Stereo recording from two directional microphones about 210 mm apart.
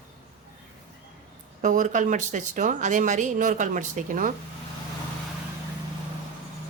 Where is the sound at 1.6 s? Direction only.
40° right (ahead or behind).